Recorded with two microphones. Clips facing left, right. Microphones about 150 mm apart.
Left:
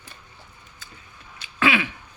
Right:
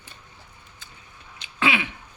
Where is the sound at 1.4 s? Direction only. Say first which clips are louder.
Left 2 dB; 20° right (ahead or behind).